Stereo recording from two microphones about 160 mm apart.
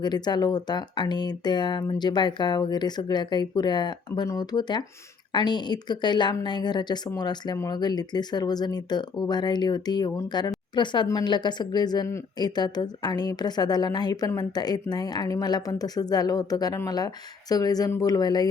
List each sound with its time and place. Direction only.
0.0 s a woman's voice: 25° left (ahead or behind)